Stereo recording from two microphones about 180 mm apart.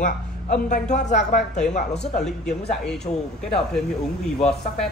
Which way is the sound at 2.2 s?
5° left (ahead or behind).